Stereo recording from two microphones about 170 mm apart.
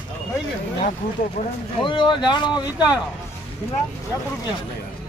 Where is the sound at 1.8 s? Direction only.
30° left (ahead or behind).